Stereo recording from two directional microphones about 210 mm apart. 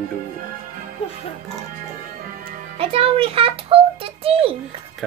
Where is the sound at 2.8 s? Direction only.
25° right (ahead or behind).